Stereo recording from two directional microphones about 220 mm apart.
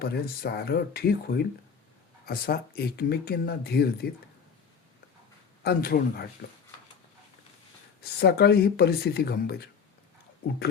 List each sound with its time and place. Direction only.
0.0 s speech: 45° left (ahead or behind)
5.6 s speech: 45° left (ahead or behind)
8.0 s speech: 45° left (ahead or behind)